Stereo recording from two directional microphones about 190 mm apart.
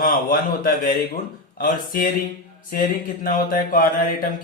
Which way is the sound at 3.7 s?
45° left (ahead or behind).